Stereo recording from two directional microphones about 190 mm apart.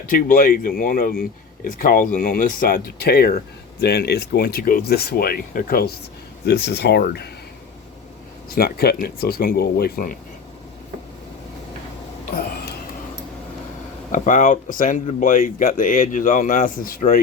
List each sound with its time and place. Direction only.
0.1 s speech: 45° left (ahead or behind)
6.4 s speech: 60° left (ahead or behind)
8.4 s speech: 55° left (ahead or behind)
14.1 s speech: 45° left (ahead or behind)